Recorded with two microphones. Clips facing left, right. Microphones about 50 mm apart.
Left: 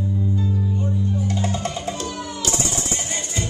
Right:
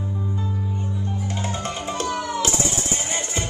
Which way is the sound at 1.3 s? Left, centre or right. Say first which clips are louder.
Left 3 dB; right.